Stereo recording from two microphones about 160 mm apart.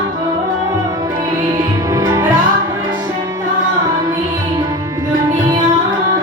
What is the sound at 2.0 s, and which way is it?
Music, 20° right (ahead or behind).